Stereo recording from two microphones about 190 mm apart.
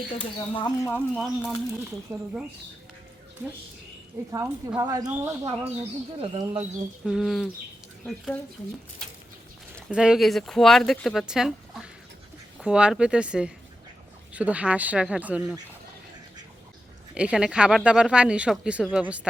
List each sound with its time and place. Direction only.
0.2 s speech: 25° left (ahead or behind); by 1.8 s centre (ahead or behind)
2.1 s speech: 15° right (ahead or behind)
4.3 s speech: 15° right (ahead or behind)
6.1 s speech: 30° right (ahead or behind)
6.6 s speech: 5° right (ahead or behind)
9.0 s a sound: 5° left (ahead or behind)
9.9 s speech: 5° right (ahead or behind)
17.2 s speech: 5° right (ahead or behind)